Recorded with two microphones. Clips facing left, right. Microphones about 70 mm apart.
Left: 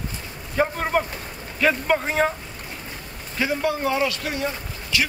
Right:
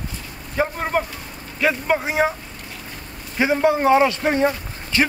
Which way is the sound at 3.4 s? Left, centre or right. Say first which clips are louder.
Right 6 dB; right.